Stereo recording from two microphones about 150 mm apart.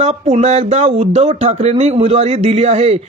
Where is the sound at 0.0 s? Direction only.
45° right (ahead or behind).